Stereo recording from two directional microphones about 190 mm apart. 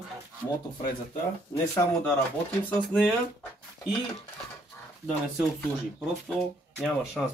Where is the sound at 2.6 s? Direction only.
5° left (ahead or behind).